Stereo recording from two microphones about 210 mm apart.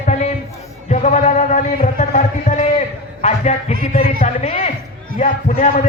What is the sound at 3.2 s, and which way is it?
A man's voice, 35° left (ahead or behind).